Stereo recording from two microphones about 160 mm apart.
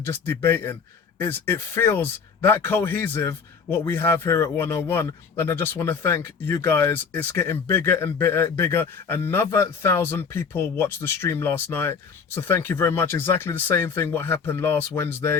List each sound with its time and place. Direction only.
0.0 s speech: 15° left (ahead or behind)